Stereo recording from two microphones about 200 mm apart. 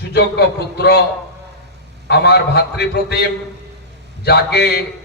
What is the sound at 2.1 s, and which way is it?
A man's voice, 55° left (ahead or behind).